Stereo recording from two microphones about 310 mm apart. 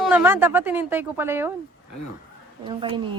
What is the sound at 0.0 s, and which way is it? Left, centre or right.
Speech, centre.